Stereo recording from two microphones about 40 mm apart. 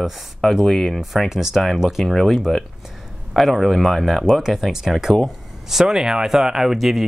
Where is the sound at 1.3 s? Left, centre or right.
Centre.